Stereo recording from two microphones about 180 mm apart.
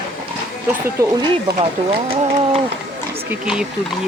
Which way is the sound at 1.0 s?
15° right (ahead or behind).